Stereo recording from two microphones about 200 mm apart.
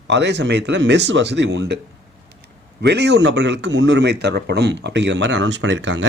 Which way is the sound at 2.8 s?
60° right (ahead or behind).